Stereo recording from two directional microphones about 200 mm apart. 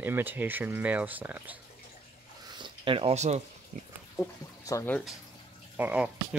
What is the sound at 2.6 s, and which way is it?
Speech, 25° right (ahead or behind).